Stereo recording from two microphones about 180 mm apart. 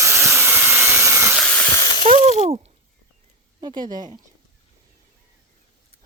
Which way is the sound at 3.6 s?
25° right (ahead or behind).